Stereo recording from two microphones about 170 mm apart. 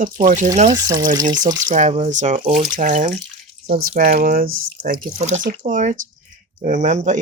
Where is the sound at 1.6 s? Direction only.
45° right (ahead or behind).